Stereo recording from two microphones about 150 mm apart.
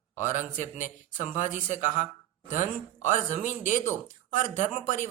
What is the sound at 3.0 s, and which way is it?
Speech, 55° left (ahead or behind).